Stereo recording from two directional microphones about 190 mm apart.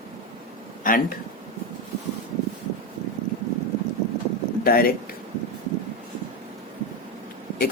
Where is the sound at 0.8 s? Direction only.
45° left (ahead or behind).